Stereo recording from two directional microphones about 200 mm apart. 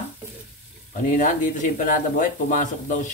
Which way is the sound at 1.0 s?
40° left (ahead or behind).